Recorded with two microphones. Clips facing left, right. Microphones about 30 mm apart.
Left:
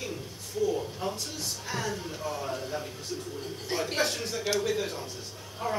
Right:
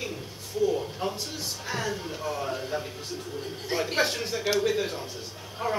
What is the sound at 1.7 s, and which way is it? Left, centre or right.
A man's voice, centre.